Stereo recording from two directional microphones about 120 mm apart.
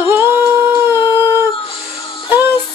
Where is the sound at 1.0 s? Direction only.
20° right (ahead or behind).